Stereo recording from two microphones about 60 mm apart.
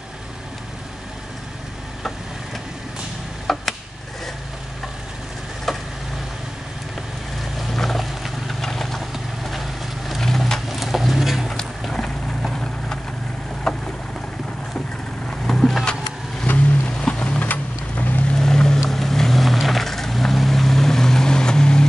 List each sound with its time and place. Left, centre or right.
3.5 s a sound: centre
5.7 s vehicle: centre
7.5 s vehicle: centre
11.8 s vehicle: centre
13.7 s boat: centre
15.2 s vehicle: centre
16.4 s vehicle: left
16.9 s rain: centre
18.3 s vehicle: centre